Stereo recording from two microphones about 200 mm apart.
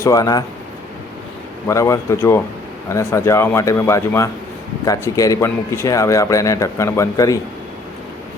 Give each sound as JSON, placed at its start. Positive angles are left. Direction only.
{"t": 0.0, "sound": "speech", "side_deg": 15}
{"t": 1.6, "sound": "speech", "side_deg": 15}